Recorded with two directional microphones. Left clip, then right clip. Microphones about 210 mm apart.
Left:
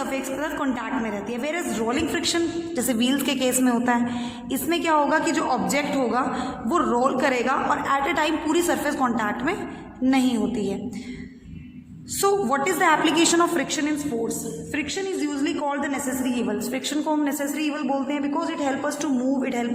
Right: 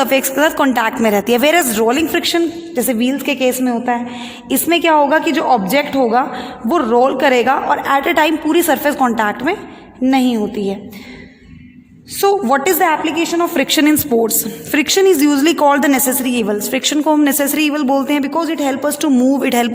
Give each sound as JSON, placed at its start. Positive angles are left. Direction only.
{"t": 0.0, "sound": "a woman's voice", "side_deg": -45}
{"t": 4.4, "sound": "a woman's voice", "side_deg": -35}
{"t": 12.2, "sound": "a woman's voice", "side_deg": -35}
{"t": 13.0, "sound": "a woman's voice", "side_deg": -15}
{"t": 13.5, "sound": "a woman's voice", "side_deg": -40}